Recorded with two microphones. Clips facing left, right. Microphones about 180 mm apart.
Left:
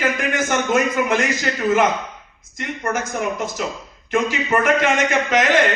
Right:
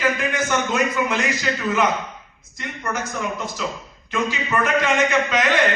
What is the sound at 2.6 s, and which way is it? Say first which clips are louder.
A man's voice: left 4 dB; 50° left (ahead or behind).